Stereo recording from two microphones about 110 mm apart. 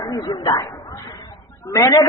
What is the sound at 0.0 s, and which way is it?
A man's voice, 35° left (ahead or behind).